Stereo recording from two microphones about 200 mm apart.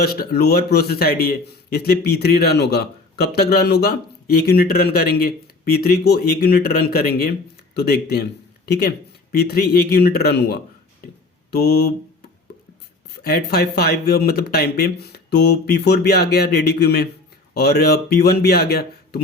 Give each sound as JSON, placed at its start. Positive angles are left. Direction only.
{"t": 0.0, "sound": "speech", "side_deg": 50}
{"t": 13.1, "sound": "speech", "side_deg": 50}